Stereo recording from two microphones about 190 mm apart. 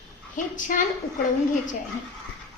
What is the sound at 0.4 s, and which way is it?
Speech, 40° left (ahead or behind).